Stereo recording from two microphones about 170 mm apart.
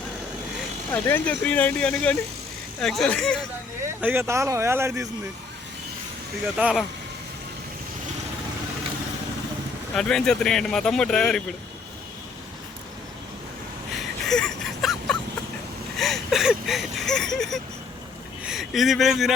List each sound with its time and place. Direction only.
1.0 s speech: 10° left (ahead or behind)
3.8 s speech: 15° right (ahead or behind)
6.6 s speech: 5° right (ahead or behind)
9.9 s speech: 5° left (ahead or behind)
13.9 s a sound: 5° left (ahead or behind)
18.4 s speech: centre (ahead or behind)